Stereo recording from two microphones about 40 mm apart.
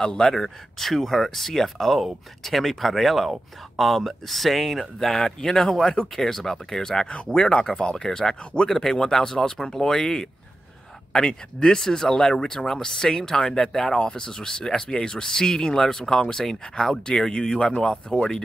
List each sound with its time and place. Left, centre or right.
0.0 s speech: centre